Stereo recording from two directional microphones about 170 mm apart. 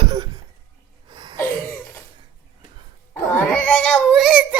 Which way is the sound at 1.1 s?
25° right (ahead or behind).